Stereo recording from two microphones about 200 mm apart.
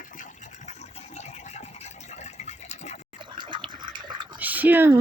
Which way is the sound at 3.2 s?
25° right (ahead or behind).